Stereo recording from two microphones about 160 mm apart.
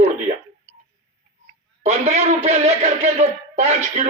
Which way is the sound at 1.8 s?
45° right (ahead or behind).